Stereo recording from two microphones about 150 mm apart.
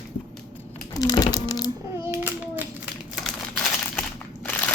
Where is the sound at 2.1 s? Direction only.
15° right (ahead or behind).